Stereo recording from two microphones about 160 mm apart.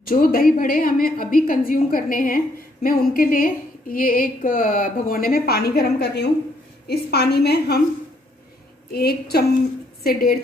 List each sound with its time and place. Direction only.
0.1 s a woman's voice: 65° left (ahead or behind); by 7.8 s 85° left
8.9 s a woman's voice: 75° left (ahead or behind)